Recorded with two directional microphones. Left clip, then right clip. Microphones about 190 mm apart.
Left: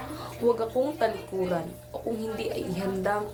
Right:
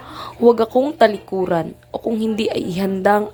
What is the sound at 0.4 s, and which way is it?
A woman's voice, 55° right (ahead or behind).